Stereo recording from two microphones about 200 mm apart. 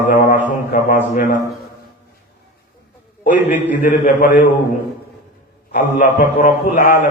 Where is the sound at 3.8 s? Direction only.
40° left (ahead or behind).